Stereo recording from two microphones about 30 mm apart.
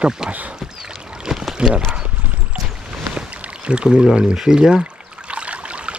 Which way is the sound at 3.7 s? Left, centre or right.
Right.